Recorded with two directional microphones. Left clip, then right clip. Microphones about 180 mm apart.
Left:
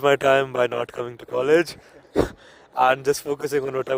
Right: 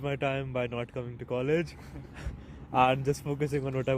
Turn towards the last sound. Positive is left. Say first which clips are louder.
# left 8 dB
turn(degrees=55)  # may be behind; listen again after turning